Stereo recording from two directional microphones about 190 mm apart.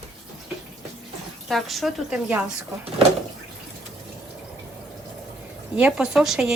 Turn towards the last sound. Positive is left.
turn(degrees=-5)  # may be behind; listen again after turning